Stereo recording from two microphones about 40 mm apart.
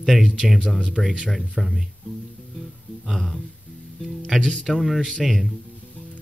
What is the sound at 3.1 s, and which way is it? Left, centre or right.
Speech, centre.